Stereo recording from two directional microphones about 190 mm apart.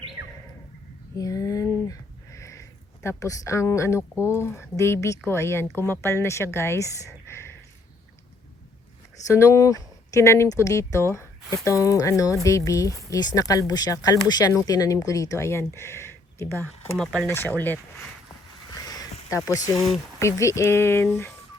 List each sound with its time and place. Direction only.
1.1 s a sound: 15° left (ahead or behind)
5.2 s speech: 15° left (ahead or behind)
9.2 s speech: 15° left (ahead or behind)
17.0 s speech: 5° left (ahead or behind)
18.7 s a sound: 20° left (ahead or behind)
19.5 s speech: 15° left (ahead or behind)